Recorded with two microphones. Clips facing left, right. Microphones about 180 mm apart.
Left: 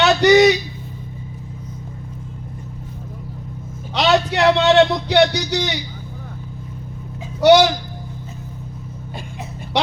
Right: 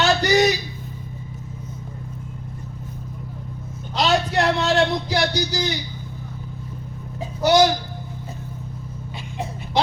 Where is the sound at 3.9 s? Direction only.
70° left (ahead or behind).